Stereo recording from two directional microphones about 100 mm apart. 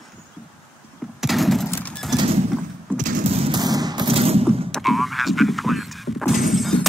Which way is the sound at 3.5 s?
40° right (ahead or behind).